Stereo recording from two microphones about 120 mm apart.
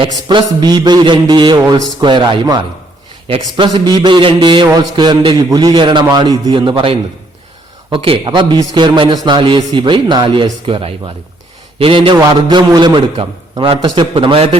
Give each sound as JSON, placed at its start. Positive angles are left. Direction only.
{"t": 0.0, "sound": "a man's voice", "side_deg": -40}
{"t": 3.2, "sound": "a man's voice", "side_deg": -50}
{"t": 3.8, "sound": "a man's voice", "side_deg": -35}
{"t": 12.1, "sound": "a man's voice", "side_deg": -35}